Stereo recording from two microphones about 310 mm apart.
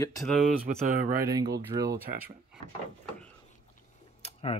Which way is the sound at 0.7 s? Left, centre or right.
Right.